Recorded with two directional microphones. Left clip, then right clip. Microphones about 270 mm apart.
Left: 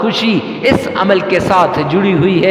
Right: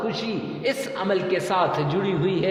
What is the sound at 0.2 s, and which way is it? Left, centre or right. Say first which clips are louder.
A man's voice: left 13 dB; left.